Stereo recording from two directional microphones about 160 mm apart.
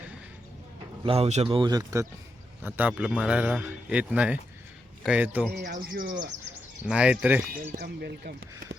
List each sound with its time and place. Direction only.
1.0 s a man's voice: 40° right (ahead or behind); by 5.5 s 10° right (ahead or behind)
5.5 s speech: 60° right (ahead or behind)
6.8 s a man's voice: 5° right (ahead or behind)
7.7 s speech: 90° right